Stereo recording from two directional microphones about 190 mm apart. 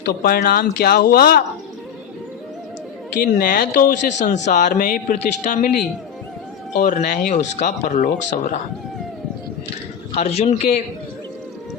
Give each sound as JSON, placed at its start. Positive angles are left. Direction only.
{"t": 0.0, "sound": "speech", "side_deg": 55}
{"t": 3.2, "sound": "speech", "side_deg": 50}
{"t": 10.2, "sound": "a man's voice", "side_deg": 35}